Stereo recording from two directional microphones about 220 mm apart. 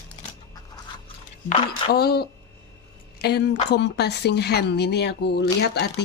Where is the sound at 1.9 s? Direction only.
45° left (ahead or behind).